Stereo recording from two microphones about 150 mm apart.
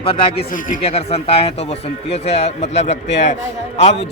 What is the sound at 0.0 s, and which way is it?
Speech, 35° left (ahead or behind).